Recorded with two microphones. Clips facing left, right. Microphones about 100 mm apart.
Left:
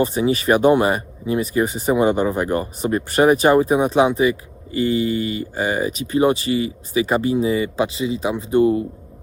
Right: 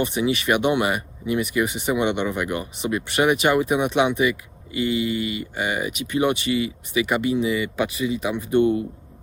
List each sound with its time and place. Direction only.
0.0 s speech: 35° left (ahead or behind)